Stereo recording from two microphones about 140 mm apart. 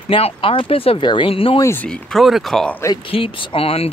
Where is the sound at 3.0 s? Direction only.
40° left (ahead or behind).